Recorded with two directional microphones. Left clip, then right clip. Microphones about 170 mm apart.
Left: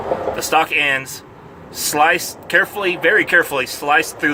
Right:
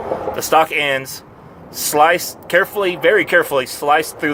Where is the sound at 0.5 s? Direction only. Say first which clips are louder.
Right 1 dB; 40° right (ahead or behind).